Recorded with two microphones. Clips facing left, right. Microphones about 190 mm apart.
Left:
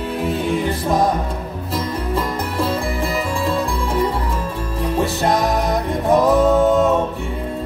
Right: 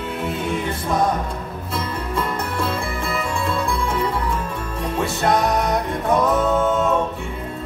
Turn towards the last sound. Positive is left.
turn(degrees=35)  # may be behind; listen again after turning